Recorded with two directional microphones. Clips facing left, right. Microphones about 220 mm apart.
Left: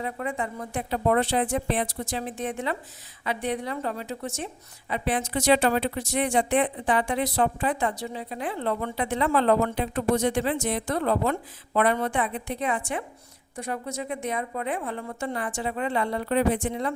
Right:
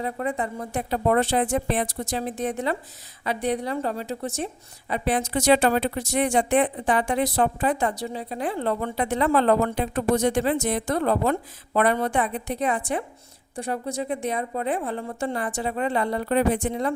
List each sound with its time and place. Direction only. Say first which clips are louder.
0.0 s a woman's voice: right 3 dB; 35° right (ahead or behind)